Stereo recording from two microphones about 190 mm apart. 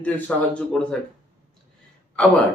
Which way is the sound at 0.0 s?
5° left (ahead or behind).